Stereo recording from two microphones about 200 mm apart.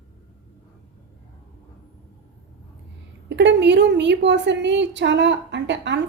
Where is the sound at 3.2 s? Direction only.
60° right (ahead or behind).